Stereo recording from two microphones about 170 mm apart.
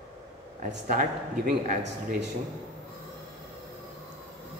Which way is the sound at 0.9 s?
50° right (ahead or behind).